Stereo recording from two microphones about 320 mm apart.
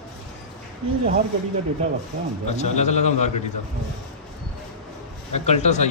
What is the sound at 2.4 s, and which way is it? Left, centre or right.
A man's voice, left.